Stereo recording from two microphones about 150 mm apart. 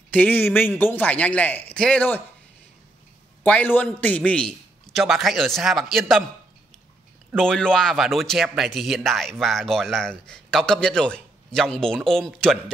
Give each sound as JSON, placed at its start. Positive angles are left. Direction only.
{"t": 0.1, "sound": "a man's voice", "side_deg": 10}
{"t": 3.4, "sound": "speech", "side_deg": 10}
{"t": 7.3, "sound": "speech", "side_deg": 5}